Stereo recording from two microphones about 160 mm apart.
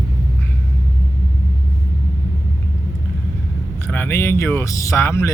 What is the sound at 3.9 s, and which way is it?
Speech, 15° left (ahead or behind).